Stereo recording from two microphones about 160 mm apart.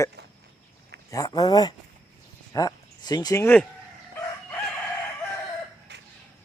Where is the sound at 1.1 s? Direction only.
20° left (ahead or behind).